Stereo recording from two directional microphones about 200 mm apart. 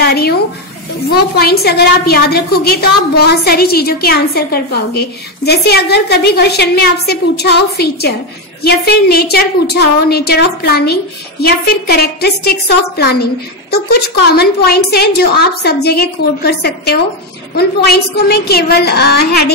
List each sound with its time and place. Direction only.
0.0 s speech: 50° left (ahead or behind)
1.4 s a woman's voice: 50° left (ahead or behind)